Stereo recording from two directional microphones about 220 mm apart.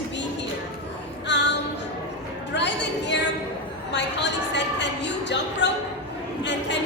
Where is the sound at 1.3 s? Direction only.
50° left (ahead or behind).